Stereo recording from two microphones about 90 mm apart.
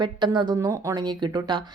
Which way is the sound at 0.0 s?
55° right (ahead or behind).